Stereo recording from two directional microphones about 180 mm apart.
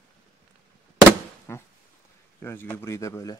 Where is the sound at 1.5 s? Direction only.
15° left (ahead or behind).